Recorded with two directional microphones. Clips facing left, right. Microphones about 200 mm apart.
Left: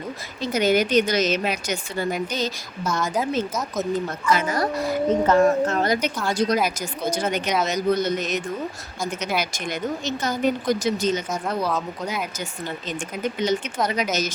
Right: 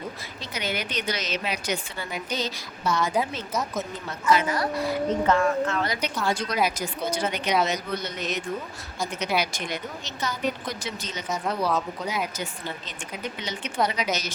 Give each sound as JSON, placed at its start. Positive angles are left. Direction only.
{"t": 0.4, "sound": "a woman's voice", "side_deg": 45}
{"t": 4.3, "sound": "a woman's voice", "side_deg": 45}
{"t": 9.4, "sound": "a woman's voice", "side_deg": 45}
{"t": 13.2, "sound": "a woman's voice", "side_deg": 45}